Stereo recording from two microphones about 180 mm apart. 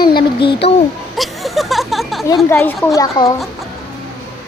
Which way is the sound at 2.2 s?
15° left (ahead or behind).